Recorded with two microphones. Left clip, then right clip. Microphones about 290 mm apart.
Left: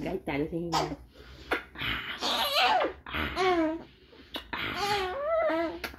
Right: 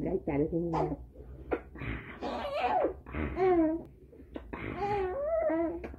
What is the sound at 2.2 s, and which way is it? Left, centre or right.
Laughter, left.